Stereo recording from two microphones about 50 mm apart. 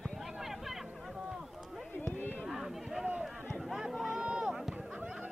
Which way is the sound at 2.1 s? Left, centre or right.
Left.